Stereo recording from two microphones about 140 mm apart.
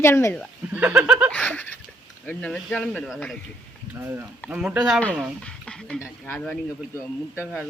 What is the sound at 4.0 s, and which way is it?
Speech, 15° right (ahead or behind).